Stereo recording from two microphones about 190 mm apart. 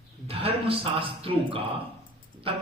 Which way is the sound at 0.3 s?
30° right (ahead or behind).